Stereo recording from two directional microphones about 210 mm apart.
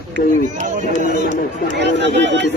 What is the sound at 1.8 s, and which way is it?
Speech, 55° right (ahead or behind).